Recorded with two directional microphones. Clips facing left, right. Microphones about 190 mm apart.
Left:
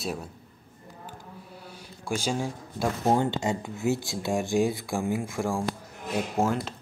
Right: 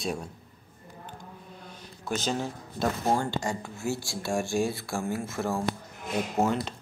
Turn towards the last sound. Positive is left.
turn(degrees=5)  # may be behind; listen again after turning